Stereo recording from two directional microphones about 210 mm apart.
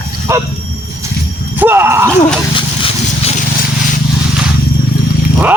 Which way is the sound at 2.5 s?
25° left (ahead or behind).